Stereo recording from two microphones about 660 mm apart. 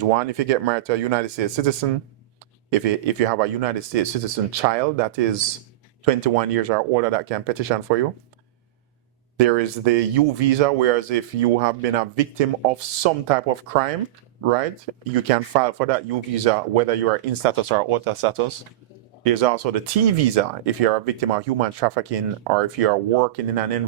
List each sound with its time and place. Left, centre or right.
0.0 s speech: right
9.4 s speech: right